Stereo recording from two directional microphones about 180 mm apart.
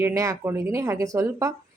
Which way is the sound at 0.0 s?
15° right (ahead or behind).